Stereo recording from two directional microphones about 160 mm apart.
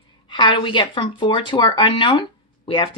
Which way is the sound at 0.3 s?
30° left (ahead or behind).